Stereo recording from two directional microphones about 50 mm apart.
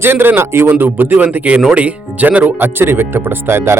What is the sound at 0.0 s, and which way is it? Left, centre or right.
A man's voice, right.